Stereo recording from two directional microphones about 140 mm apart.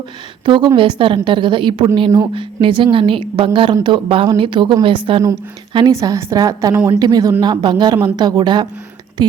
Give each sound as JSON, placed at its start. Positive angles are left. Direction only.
{"t": 0.4, "sound": "a woman's voice", "side_deg": -35}
{"t": 5.7, "sound": "a woman's voice", "side_deg": -25}